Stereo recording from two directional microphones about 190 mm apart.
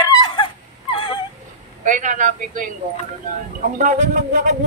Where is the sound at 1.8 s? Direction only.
40° right (ahead or behind).